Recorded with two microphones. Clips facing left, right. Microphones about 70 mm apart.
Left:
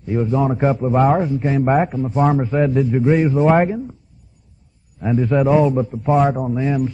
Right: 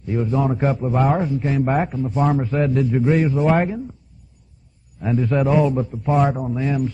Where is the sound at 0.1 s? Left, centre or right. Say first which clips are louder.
Left 2 dB; centre.